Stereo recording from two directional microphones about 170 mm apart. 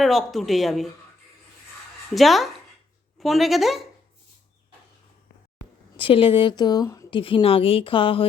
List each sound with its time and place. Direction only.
0.0 s a woman's voice: centre (ahead or behind)
2.1 s a woman's voice: centre (ahead or behind)
6.0 s speech: 30° left (ahead or behind)
7.1 s speech: 30° left (ahead or behind)